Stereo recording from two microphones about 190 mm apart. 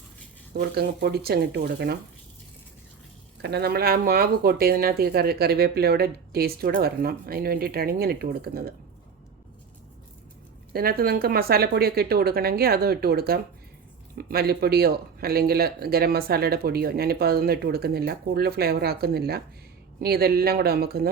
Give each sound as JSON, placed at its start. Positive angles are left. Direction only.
{"t": 0.5, "sound": "speech", "side_deg": -55}
{"t": 3.4, "sound": "speech", "side_deg": -60}
{"t": 10.7, "sound": "speech", "side_deg": -50}